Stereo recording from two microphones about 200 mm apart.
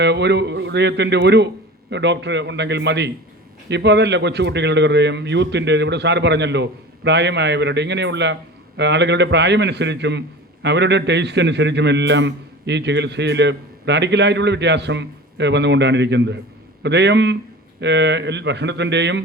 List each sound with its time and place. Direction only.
0.0 s a man's voice: 60° right (ahead or behind)